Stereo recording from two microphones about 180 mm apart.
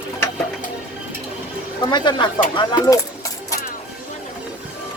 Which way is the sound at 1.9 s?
25° left (ahead or behind).